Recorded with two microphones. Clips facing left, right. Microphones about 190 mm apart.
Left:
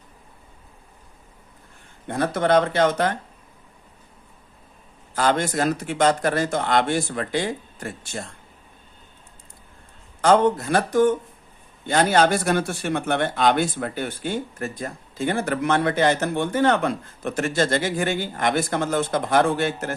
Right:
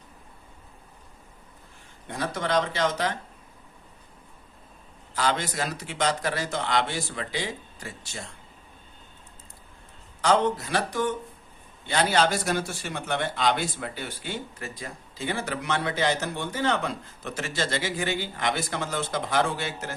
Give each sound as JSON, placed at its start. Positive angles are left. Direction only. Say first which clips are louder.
{"t": 2.0, "sound": "speech", "louder": "left 8 dB", "side_deg": 55}
{"t": 5.1, "sound": "a man's voice", "louder": "left 6 dB", "side_deg": 50}
{"t": 10.2, "sound": "a man's voice", "louder": "left 6 dB", "side_deg": 55}